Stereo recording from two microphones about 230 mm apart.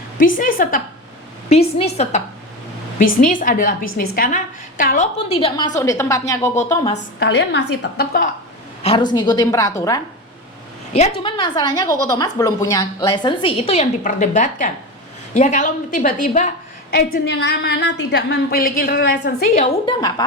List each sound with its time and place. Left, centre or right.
0.3 s a woman's voice: left
1.5 s a woman's voice: left
5.3 s a woman's voice: left
6.9 s a woman's voice: left
8.8 s a woman's voice: left
10.9 s a woman's voice: left
19.5 s a woman's voice: centre